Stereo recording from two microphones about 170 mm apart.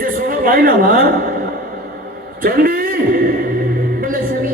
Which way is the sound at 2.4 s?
55° right (ahead or behind).